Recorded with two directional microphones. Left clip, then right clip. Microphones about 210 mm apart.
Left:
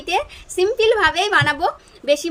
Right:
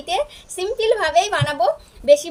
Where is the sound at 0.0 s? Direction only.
20° left (ahead or behind).